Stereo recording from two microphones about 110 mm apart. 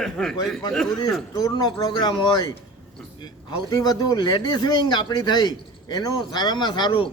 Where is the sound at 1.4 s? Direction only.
35° left (ahead or behind).